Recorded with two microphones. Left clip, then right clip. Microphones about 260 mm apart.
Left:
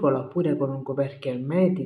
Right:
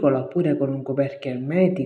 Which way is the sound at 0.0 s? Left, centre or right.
Centre.